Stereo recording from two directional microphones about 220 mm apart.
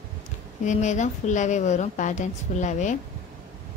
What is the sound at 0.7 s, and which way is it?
A woman's voice, 35° left (ahead or behind).